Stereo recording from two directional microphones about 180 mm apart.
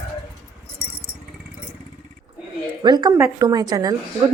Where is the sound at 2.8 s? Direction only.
20° right (ahead or behind).